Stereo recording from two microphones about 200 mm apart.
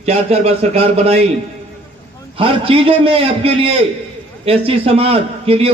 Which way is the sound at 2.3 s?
25° right (ahead or behind).